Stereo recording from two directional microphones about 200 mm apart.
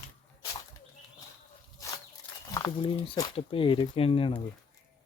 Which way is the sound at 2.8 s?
25° left (ahead or behind).